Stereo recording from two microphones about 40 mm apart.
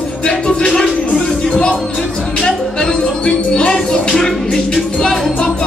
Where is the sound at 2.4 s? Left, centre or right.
Centre.